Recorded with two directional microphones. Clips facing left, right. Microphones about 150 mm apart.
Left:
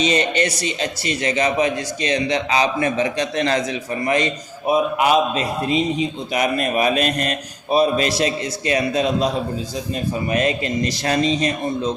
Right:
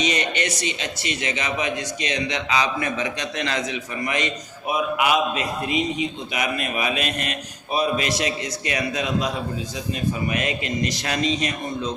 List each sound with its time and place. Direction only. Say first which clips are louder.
0.0 s a man's voice: left 5 dB; 30° left (ahead or behind)